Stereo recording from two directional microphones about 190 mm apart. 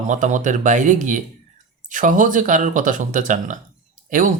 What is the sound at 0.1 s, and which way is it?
Speech, 40° right (ahead or behind).